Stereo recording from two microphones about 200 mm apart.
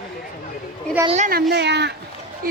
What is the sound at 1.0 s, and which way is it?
Speech, 30° right (ahead or behind).